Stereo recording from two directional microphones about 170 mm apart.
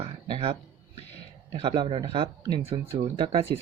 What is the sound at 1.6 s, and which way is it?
Speech, 30° right (ahead or behind).